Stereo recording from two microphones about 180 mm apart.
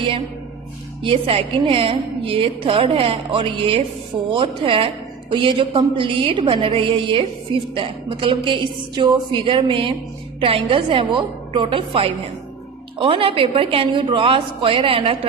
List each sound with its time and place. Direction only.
1.0 s a woman's voice: 30° right (ahead or behind)